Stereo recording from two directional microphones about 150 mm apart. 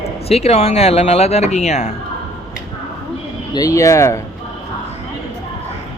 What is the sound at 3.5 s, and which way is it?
Speech, 20° left (ahead or behind).